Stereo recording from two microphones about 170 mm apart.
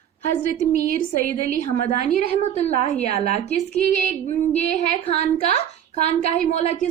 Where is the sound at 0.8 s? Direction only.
60° right (ahead or behind).